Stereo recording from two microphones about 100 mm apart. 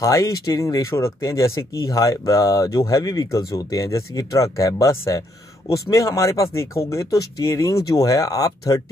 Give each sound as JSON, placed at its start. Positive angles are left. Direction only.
{"t": 0.0, "sound": "speech", "side_deg": 30}